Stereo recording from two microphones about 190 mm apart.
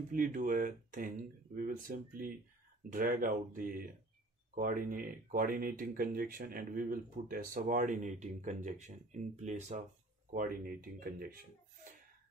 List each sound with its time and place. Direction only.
0.1 s speech: 45° right (ahead or behind)
10.3 s speech: 50° right (ahead or behind)